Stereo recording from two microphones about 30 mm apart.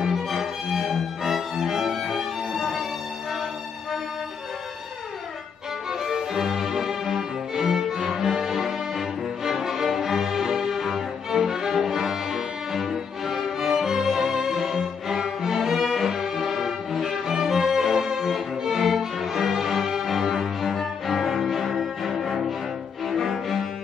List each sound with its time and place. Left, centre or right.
0.3 s music: centre
6.0 s music: centre
20.7 s cello: centre